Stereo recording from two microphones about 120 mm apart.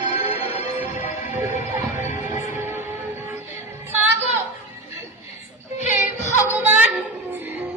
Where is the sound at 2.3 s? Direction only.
25° right (ahead or behind).